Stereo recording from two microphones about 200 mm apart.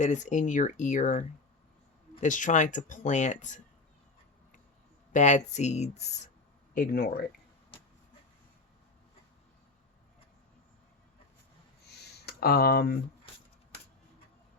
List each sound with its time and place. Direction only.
0.0 s speech: 35° left (ahead or behind)
5.1 s speech: 35° left (ahead or behind)
6.7 s speech: 45° left (ahead or behind)
11.9 s a sound: 55° left (ahead or behind)